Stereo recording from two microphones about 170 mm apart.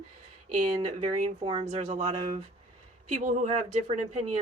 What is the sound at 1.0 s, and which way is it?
Speech, 30° right (ahead or behind).